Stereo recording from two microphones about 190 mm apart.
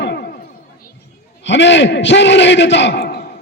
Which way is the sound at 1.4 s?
70° left (ahead or behind).